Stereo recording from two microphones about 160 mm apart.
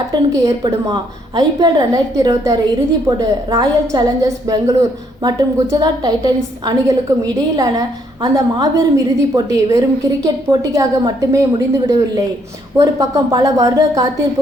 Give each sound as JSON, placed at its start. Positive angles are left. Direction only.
{"t": 0.1, "sound": "a woman's voice", "side_deg": -25}